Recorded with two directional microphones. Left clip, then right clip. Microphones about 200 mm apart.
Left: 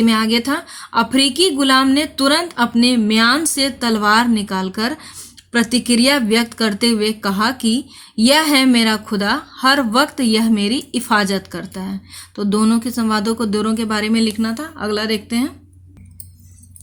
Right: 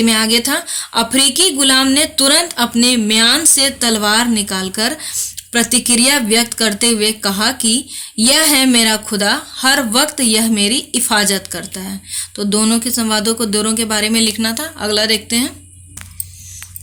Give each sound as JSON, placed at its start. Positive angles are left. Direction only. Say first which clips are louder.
{"t": 0.0, "sound": "speech", "louder": "right 3 dB", "side_deg": 45}